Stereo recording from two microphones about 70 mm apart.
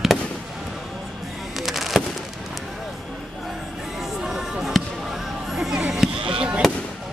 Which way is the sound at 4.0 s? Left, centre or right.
Centre.